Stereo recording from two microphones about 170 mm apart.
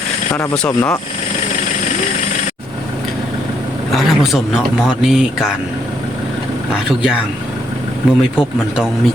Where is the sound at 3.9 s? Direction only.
Centre (ahead or behind).